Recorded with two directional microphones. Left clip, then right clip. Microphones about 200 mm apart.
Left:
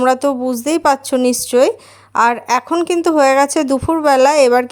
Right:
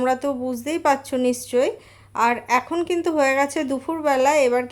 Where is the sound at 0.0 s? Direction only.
35° left (ahead or behind).